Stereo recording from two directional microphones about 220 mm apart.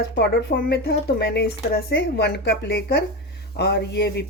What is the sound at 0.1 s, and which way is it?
Speech, 50° left (ahead or behind).